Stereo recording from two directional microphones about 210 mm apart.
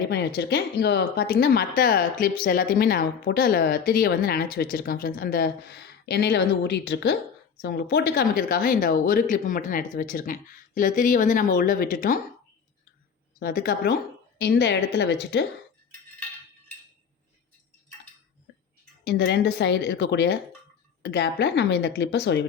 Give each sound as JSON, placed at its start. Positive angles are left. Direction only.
{"t": 0.1, "sound": "a woman's voice", "side_deg": 50}
{"t": 13.4, "sound": "a woman's voice", "side_deg": 45}
{"t": 19.0, "sound": "a woman's voice", "side_deg": 50}